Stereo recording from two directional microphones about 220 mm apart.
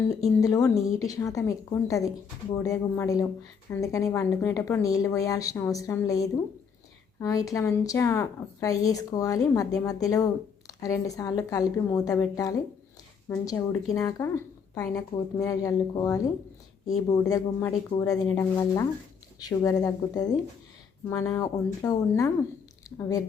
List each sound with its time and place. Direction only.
0.1 s a woman's voice: 15° left (ahead or behind)